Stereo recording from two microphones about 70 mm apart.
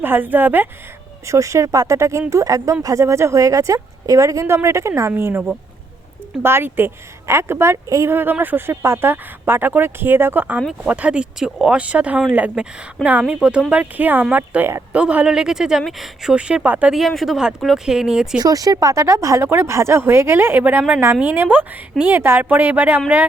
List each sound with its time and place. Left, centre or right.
0.0 s a woman's voice: right
1.3 s speech: right
5.1 s speech: right
6.4 s speech: right
8.1 s a woman's voice: right; by 16.3 s centre
16.3 s speech: centre
17.1 s speech: centre
18.3 s a woman's voice: right